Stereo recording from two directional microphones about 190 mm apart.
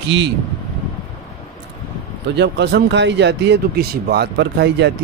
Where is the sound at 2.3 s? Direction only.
65° right (ahead or behind).